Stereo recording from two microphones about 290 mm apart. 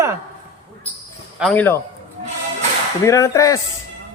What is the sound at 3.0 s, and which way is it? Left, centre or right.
Speech, centre.